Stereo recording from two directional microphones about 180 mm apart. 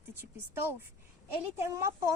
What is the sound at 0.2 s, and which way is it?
A woman's voice, 10° right (ahead or behind).